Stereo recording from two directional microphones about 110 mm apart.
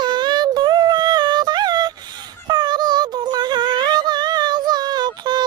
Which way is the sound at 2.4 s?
40° right (ahead or behind).